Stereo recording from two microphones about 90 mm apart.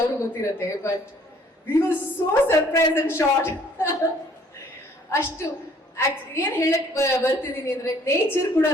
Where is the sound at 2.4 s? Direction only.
30° left (ahead or behind).